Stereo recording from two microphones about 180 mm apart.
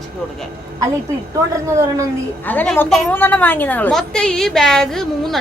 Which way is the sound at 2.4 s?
5° left (ahead or behind).